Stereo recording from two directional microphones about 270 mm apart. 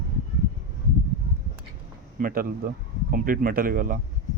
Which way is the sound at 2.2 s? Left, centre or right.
Right.